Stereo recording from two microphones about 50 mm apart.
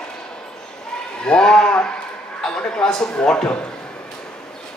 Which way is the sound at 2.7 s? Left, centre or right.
Centre.